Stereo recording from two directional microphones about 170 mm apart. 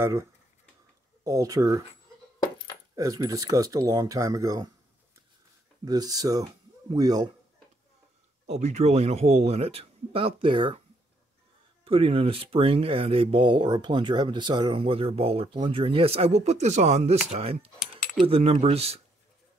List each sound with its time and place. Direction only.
1.2 s speech: 20° right (ahead or behind)
3.0 s speech: 20° right (ahead or behind)
5.9 s speech: 20° right (ahead or behind)
8.5 s speech: 40° right (ahead or behind)
11.8 s speech: 35° right (ahead or behind)